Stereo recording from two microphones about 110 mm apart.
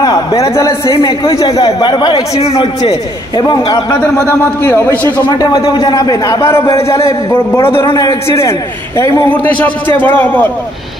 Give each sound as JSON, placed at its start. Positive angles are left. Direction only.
{"t": 0.0, "sound": "a man's voice", "side_deg": 35}
{"t": 0.9, "sound": "a man's voice", "side_deg": 55}
{"t": 1.4, "sound": "a man's voice", "side_deg": 35}
{"t": 2.4, "sound": "speech", "side_deg": 60}
{"t": 2.8, "sound": "a man's voice", "side_deg": 40}
{"t": 4.3, "sound": "a man's voice", "side_deg": 20}
{"t": 5.6, "sound": "speech", "side_deg": 55}
{"t": 5.9, "sound": "a man's voice", "side_deg": 35}
{"t": 7.9, "sound": "a man's voice", "side_deg": 35}
{"t": 9.3, "sound": "a man's voice", "side_deg": 15}